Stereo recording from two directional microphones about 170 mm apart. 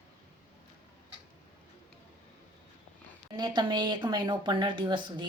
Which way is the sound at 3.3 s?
25° right (ahead or behind).